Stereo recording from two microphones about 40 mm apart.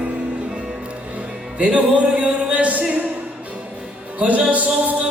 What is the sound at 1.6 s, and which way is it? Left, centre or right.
Music, right.